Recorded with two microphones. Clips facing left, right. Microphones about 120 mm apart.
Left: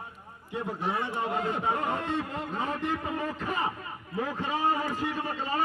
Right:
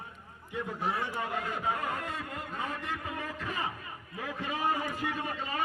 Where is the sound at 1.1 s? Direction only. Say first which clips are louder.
Left 5 dB; 25° left (ahead or behind).